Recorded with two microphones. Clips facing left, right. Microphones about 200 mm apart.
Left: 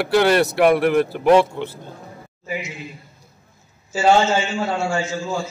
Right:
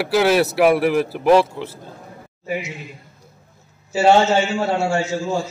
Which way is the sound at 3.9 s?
65° right (ahead or behind).